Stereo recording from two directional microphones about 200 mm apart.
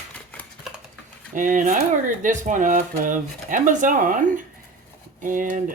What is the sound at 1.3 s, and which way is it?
Speech, 40° right (ahead or behind).